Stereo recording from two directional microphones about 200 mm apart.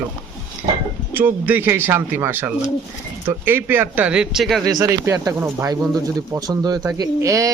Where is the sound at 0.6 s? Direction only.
25° right (ahead or behind).